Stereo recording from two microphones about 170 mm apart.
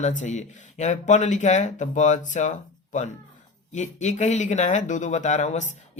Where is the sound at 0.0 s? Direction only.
45° left (ahead or behind).